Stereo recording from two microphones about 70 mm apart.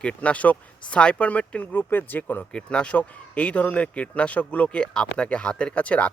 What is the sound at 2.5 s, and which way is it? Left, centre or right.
Speech, centre.